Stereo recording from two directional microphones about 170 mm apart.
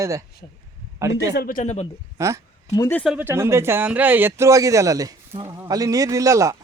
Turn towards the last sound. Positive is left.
turn(degrees=-20)  # may be behind; listen again after turning